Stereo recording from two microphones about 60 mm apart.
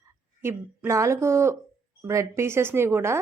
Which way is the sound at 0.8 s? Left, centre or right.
Right.